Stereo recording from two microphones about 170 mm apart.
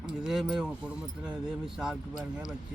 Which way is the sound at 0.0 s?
Centre (ahead or behind).